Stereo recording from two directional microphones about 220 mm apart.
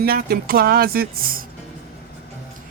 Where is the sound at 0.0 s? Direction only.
45° right (ahead or behind).